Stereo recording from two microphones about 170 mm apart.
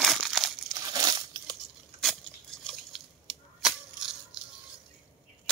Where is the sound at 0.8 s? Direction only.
25° right (ahead or behind).